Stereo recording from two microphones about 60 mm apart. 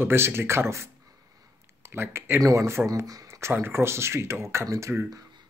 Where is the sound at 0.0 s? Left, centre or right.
Right.